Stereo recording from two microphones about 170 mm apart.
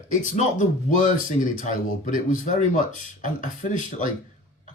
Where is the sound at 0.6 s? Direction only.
50° left (ahead or behind).